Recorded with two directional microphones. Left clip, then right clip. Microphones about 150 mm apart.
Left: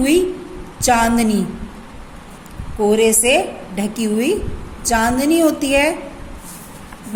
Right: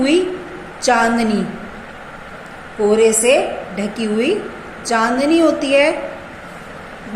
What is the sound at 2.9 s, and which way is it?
A woman's voice, 55° left (ahead or behind).